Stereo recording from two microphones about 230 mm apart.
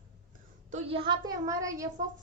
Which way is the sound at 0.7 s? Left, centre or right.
Right.